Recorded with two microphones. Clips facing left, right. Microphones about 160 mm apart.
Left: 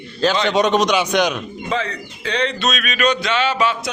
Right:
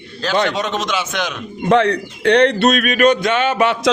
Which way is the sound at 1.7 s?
70° right (ahead or behind).